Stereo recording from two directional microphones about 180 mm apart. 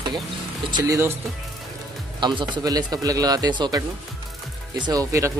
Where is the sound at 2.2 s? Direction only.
25° right (ahead or behind).